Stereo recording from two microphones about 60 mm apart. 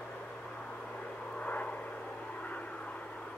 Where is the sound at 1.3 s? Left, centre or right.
Left.